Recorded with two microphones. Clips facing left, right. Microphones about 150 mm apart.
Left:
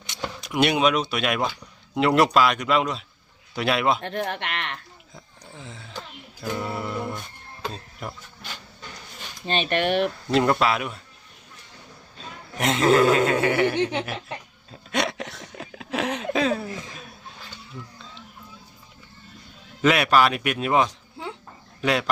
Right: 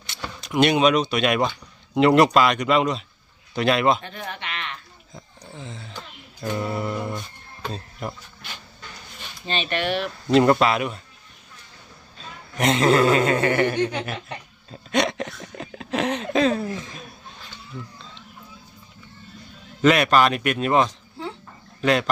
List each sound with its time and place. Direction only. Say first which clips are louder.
0.0 s speech: left 3 dB; 15° left (ahead or behind)
4.0 s speech: left 6 dB; 70° left (ahead or behind)
5.1 s a sound: right 4 dB; 5° left (ahead or behind)
6.4 s speech: right 3 dB; centre (ahead or behind)
9.5 s speech: left 2 dB; 50° left (ahead or behind)
10.2 s speech: right 6 dB; centre (ahead or behind)
12.5 s speech: right 1 dB; centre (ahead or behind)
16.9 s chuckle: right 2 dB; centre (ahead or behind)
19.8 s a man's voice: right 2 dB; 5° left (ahead or behind)